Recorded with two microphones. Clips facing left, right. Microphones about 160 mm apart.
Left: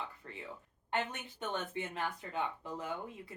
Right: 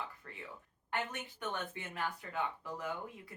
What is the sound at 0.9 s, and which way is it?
Speech, 25° left (ahead or behind).